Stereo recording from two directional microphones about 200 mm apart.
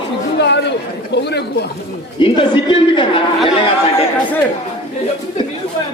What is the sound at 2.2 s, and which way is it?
A man's voice, 25° left (ahead or behind).